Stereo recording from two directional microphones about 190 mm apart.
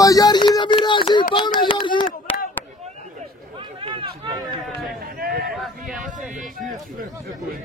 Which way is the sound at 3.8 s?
25° right (ahead or behind).